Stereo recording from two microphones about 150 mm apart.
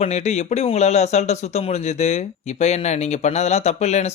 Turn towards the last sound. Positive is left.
turn(degrees=50)  # may be behind; listen again after turning